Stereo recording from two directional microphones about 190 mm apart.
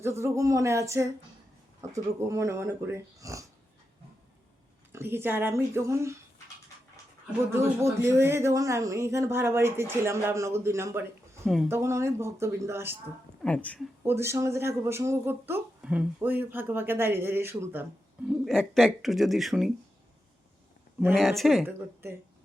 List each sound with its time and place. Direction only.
0.0 s speech: 15° right (ahead or behind)
4.9 s speech: 10° right (ahead or behind)
7.5 s speech: 15° right (ahead or behind)
11.4 s speech: centre (ahead or behind)
11.7 s speech: 15° right (ahead or behind)
13.4 s speech: 5° left (ahead or behind)
14.0 s speech: 15° right (ahead or behind)
18.3 s speech: centre (ahead or behind)
21.2 s speech: centre (ahead or behind)